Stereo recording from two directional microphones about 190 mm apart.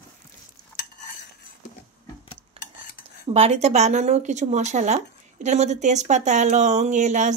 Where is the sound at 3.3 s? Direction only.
35° right (ahead or behind).